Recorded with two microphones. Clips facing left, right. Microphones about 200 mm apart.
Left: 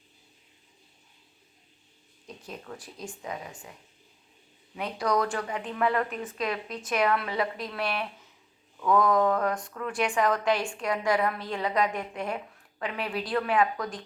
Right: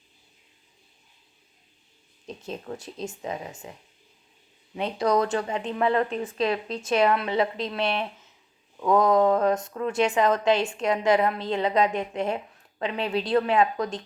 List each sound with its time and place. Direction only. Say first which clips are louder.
2.2 s a woman's voice: right 6 dB; 25° right (ahead or behind)